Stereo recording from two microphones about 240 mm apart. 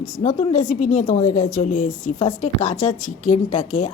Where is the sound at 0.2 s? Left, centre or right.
Left.